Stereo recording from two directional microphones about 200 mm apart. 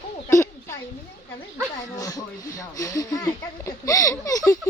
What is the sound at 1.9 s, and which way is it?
Speech, 15° left (ahead or behind).